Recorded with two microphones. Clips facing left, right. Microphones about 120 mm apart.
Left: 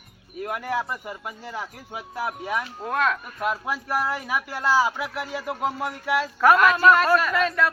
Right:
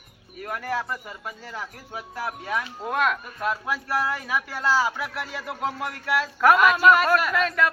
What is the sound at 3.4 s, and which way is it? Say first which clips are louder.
Speech: left 1 dB; 10° left (ahead or behind).